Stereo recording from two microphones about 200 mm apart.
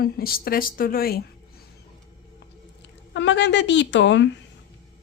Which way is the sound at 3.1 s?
65° left (ahead or behind).